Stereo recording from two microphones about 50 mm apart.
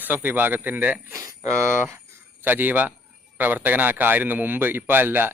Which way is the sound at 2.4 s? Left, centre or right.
Right.